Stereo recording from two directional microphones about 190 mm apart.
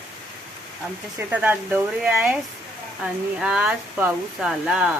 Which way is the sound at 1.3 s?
10° right (ahead or behind).